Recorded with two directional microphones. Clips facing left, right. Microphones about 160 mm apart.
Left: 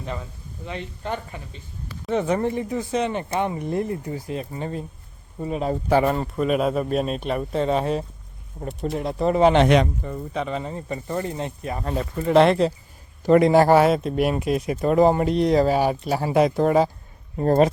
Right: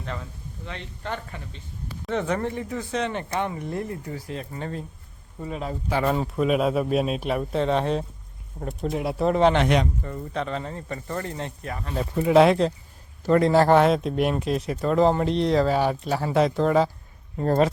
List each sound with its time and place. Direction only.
0.0 s speech: 10° left (ahead or behind)
3.2 s speech: 25° left (ahead or behind)
6.1 s speech: centre (ahead or behind); by 11.8 s 15° left (ahead or behind)
12.1 s speech: 5° right (ahead or behind)
13.2 s speech: 15° left (ahead or behind)